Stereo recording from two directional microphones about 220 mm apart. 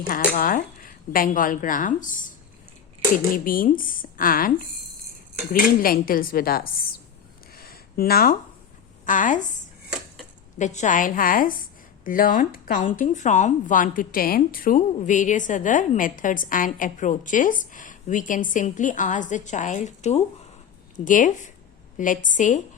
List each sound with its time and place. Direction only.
0.1 s speech: 40° left (ahead or behind)
3.3 s speech: 40° left (ahead or behind)
7.5 s a sound: 45° left (ahead or behind)
9.0 s speech: 35° left (ahead or behind)
10.6 s speech: 35° left (ahead or behind)